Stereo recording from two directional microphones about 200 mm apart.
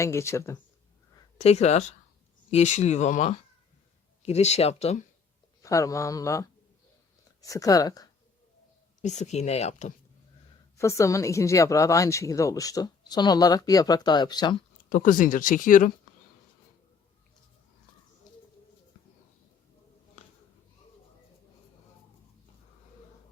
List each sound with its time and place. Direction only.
0.0 s a woman's voice: 15° left (ahead or behind)
1.4 s speech: 30° left (ahead or behind)
5.6 s a woman's voice: 15° left (ahead or behind)
9.0 s speech: 35° left (ahead or behind)
10.8 s a woman's voice: 15° left (ahead or behind)
14.8 s speech: 45° left (ahead or behind)